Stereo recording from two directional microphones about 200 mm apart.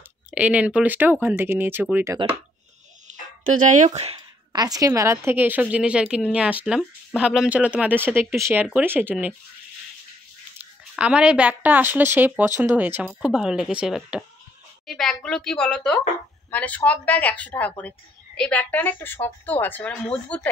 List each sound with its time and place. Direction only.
0.3 s a woman's voice: 5° right (ahead or behind)
3.1 s a sound: 35° right (ahead or behind)
3.6 s speech: 40° right (ahead or behind)
4.5 s a woman's voice: 20° right (ahead or behind)
10.6 s a woman's voice: 5° right (ahead or behind)